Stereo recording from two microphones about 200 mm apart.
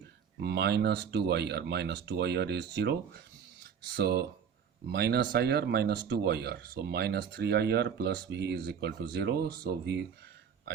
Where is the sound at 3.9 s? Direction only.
50° right (ahead or behind).